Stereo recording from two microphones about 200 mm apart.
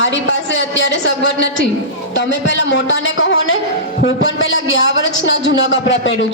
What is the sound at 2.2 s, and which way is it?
A woman's voice, 65° left (ahead or behind).